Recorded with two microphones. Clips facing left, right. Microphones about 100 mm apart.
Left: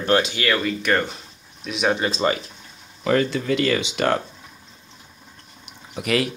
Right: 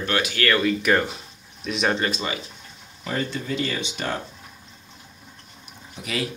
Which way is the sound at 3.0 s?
90° left.